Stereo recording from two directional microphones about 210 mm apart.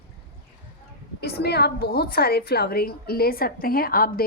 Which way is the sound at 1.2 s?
50° left (ahead or behind).